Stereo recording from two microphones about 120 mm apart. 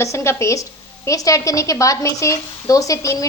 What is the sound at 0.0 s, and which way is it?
A woman's voice, 25° left (ahead or behind).